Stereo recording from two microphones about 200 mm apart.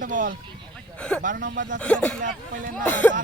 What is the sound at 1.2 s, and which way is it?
Speech, 40° right (ahead or behind).